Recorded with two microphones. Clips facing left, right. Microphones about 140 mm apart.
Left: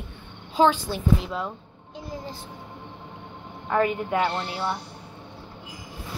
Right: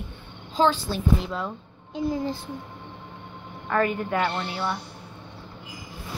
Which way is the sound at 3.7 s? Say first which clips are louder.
Left 1 dB; 20° left (ahead or behind).